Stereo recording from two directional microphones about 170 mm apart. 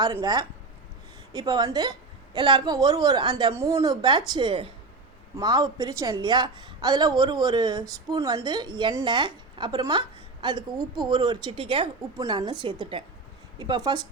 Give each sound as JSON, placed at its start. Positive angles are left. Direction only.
{"t": 0.0, "sound": "a woman's voice", "side_deg": -20}
{"t": 12.1, "sound": "a woman's voice", "side_deg": -20}